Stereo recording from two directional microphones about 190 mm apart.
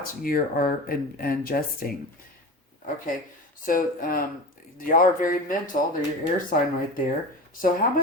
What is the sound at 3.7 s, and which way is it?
Speech, 45° left (ahead or behind).